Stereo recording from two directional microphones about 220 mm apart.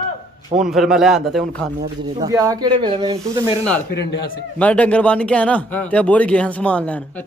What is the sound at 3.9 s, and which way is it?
Speech, 50° left (ahead or behind).